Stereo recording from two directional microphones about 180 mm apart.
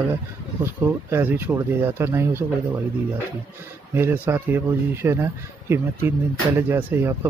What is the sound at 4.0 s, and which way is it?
Speech, 10° right (ahead or behind).